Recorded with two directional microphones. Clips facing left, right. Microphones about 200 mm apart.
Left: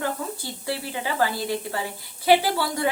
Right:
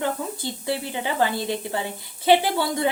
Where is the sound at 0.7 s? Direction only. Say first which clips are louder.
Right 2 dB; 20° right (ahead or behind).